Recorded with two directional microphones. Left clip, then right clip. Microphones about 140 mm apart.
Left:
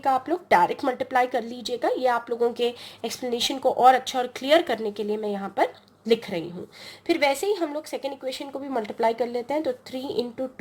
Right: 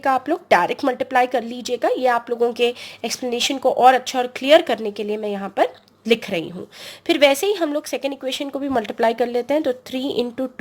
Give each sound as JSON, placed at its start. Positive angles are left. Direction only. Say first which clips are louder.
{"t": 0.0, "sound": "a woman's voice", "louder": "right 4 dB", "side_deg": -35}
{"t": 7.1, "sound": "speech", "louder": "right 7 dB", "side_deg": -50}